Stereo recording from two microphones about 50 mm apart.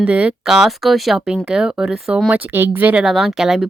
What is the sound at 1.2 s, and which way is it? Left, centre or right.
Speech, centre.